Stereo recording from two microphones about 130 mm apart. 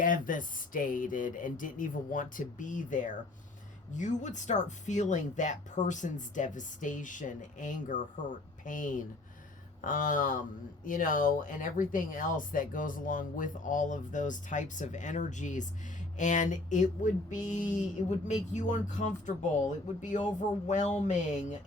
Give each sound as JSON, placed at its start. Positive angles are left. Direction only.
{"t": 0.0, "sound": "speech", "side_deg": 90}
{"t": 3.9, "sound": "speech", "side_deg": 70}